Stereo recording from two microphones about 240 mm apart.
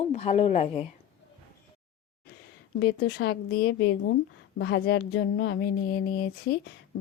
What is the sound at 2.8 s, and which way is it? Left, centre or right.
A woman's voice, left.